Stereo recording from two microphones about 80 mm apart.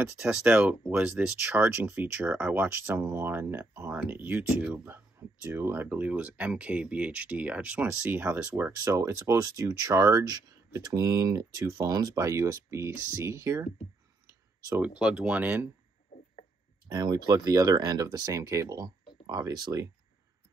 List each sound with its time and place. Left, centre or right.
0.2 s speech: centre
2.0 s speech: right
8.8 s speech: right
14.2 s clicking: right
15.0 s speech: centre
16.8 s speech: right